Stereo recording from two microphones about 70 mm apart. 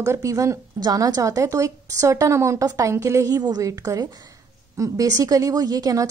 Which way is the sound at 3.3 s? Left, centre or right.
Right.